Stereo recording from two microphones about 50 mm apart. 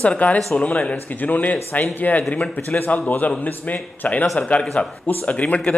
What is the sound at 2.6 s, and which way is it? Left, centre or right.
Speech, left.